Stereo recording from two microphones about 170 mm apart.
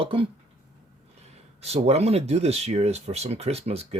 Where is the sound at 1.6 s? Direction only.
40° right (ahead or behind).